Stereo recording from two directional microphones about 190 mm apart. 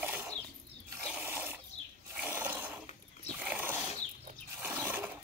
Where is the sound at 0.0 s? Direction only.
10° right (ahead or behind).